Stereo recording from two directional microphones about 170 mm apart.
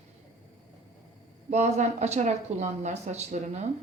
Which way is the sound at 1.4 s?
40° right (ahead or behind).